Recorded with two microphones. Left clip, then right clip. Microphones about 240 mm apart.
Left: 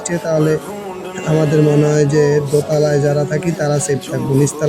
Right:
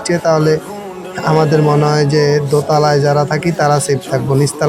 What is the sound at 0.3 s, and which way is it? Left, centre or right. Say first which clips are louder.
Speech: right 3 dB; right.